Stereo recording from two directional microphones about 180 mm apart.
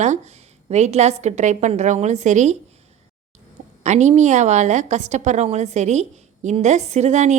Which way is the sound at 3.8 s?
40° right (ahead or behind).